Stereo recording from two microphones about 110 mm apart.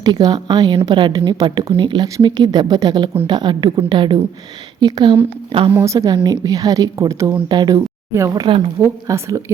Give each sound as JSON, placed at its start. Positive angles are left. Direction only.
{"t": 0.0, "sound": "a woman's voice", "side_deg": -40}
{"t": 5.5, "sound": "speech", "side_deg": -55}
{"t": 5.8, "sound": "speech", "side_deg": -30}
{"t": 7.4, "sound": "a woman's voice", "side_deg": -40}
{"t": 8.8, "sound": "speech", "side_deg": -25}